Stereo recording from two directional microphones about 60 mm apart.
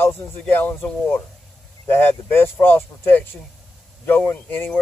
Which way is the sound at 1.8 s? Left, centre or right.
Left.